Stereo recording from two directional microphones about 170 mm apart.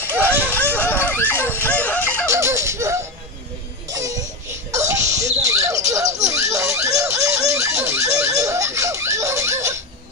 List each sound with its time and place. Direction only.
0.1 s a sound: 10° right (ahead or behind)
0.6 s dog: 10° left (ahead or behind)
1.4 s dog: 10° right (ahead or behind)
1.7 s music: 10° left (ahead or behind)
2.2 s laughter: 15° right (ahead or behind)
3.9 s baby cry: 20° right (ahead or behind)
4.7 s a sound: 20° right (ahead or behind)
6.2 s baby laughter: 20° right (ahead or behind)
8.4 s snicker: 20° right (ahead or behind)